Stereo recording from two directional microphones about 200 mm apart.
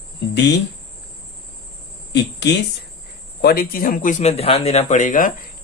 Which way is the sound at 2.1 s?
60° left (ahead or behind).